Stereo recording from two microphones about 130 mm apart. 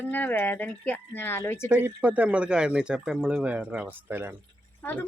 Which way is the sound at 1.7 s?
10° right (ahead or behind).